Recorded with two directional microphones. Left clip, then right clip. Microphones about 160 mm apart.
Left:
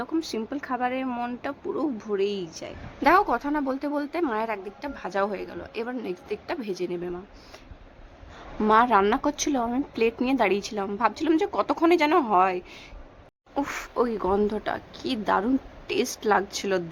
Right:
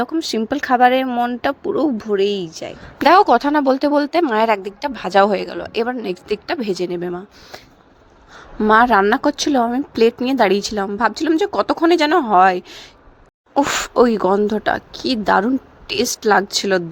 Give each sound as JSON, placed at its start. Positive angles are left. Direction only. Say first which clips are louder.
{"t": 0.0, "sound": "speech", "louder": "right 9 dB", "side_deg": -45}
{"t": 1.0, "sound": "speech", "louder": "right 12 dB", "side_deg": -35}
{"t": 3.1, "sound": "speech", "louder": "right 9 dB", "side_deg": -45}
{"t": 8.6, "sound": "speech", "louder": "right 7 dB", "side_deg": -35}